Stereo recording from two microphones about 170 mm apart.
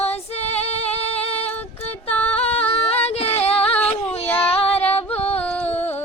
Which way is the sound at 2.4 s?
35° left (ahead or behind).